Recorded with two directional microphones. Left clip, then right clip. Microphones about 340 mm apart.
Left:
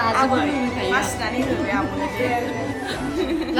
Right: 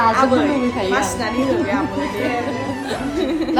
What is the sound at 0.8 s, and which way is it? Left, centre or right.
Speech, centre.